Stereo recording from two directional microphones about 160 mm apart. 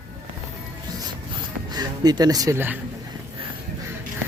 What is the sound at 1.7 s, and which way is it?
Speech, 25° right (ahead or behind).